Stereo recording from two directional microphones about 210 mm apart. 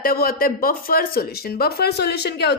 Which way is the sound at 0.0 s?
45° left (ahead or behind).